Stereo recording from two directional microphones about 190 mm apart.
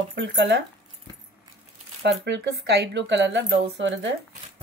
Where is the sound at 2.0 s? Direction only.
65° right (ahead or behind).